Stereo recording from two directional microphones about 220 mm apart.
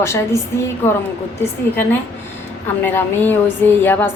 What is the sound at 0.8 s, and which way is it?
A woman's voice, 10° left (ahead or behind).